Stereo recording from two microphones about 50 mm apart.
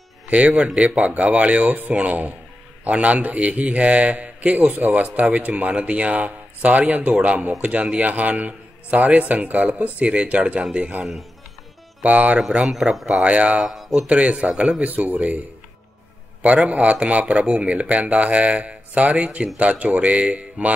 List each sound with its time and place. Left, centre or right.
0.3 s a man's voice: right
12.0 s a man's voice: right
12.4 s speech: centre
12.7 s speech: centre
13.0 s a man's voice: right
13.7 s a sound: centre
14.0 s a man's voice: right
14.8 s speech: right
16.4 s a man's voice: right